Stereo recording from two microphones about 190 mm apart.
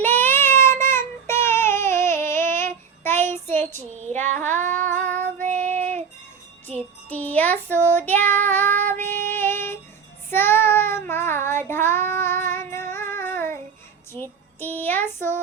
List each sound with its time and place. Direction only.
0.0 s child singing: 10° left (ahead or behind)
3.8 s child singing: 40° right (ahead or behind)
4.4 s music: 10° left (ahead or behind)
5.4 s child singing: 40° right (ahead or behind)
6.7 s music: 10° left (ahead or behind)
9.3 s a sound: 10° left (ahead or behind)
10.2 s child singing: 10° left (ahead or behind)
14.1 s a sound: 10° left (ahead or behind)